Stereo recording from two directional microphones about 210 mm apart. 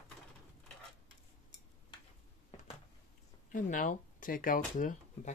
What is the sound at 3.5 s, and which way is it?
Speech, 40° left (ahead or behind).